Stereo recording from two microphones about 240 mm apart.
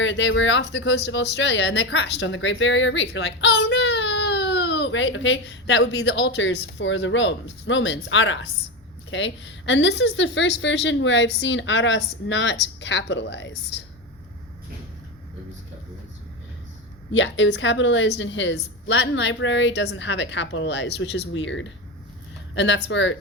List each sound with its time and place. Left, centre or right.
0.0 s speech: left
17.1 s speech: left